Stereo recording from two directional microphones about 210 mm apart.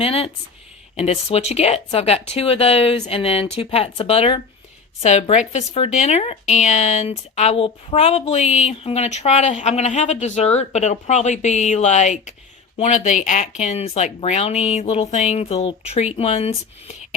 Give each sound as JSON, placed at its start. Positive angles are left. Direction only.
{"t": 0.0, "sound": "speech", "side_deg": 30}